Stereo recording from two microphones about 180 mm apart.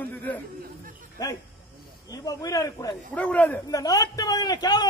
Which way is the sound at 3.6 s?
20° left (ahead or behind).